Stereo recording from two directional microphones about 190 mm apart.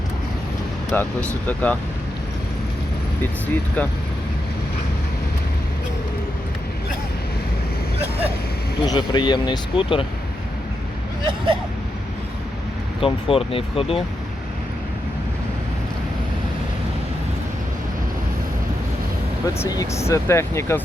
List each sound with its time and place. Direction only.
0.9 s speech: 10° left (ahead or behind)
3.4 s speech: 10° left (ahead or behind)
8.8 s speech: 25° left (ahead or behind)
13.0 s speech: 25° left (ahead or behind)
19.5 s speech: 20° left (ahead or behind)